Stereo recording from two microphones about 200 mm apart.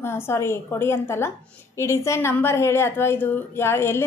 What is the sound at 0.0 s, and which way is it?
A woman's voice, 10° left (ahead or behind).